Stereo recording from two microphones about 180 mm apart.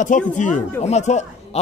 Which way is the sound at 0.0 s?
45° left (ahead or behind).